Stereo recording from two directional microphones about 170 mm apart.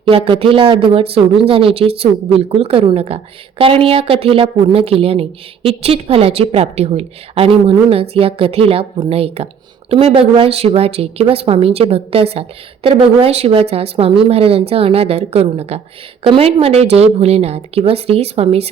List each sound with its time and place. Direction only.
0.0 s a woman's voice: 30° right (ahead or behind)